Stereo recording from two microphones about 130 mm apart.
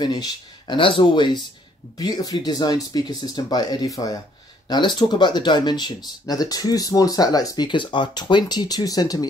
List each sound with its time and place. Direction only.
0.0 s speech: 30° left (ahead or behind)